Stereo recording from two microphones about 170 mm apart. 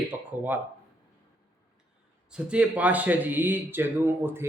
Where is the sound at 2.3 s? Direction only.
5° right (ahead or behind).